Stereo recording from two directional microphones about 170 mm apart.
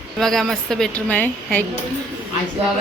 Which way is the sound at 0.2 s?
Centre (ahead or behind).